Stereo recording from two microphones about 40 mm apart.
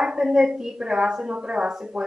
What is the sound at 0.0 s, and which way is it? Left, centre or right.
A woman's voice, centre.